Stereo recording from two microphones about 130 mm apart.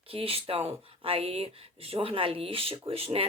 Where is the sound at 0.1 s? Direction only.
45° right (ahead or behind).